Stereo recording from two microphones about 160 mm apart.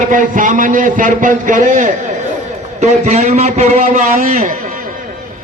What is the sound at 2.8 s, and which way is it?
A man's voice, 40° right (ahead or behind).